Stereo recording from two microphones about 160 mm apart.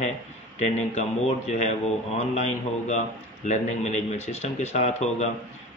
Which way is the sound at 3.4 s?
45° left (ahead or behind).